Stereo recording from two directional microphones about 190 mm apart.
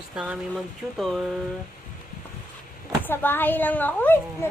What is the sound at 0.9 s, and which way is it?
Speech, centre (ahead or behind).